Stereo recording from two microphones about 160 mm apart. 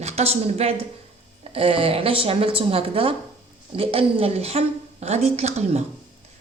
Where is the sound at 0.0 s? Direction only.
40° right (ahead or behind).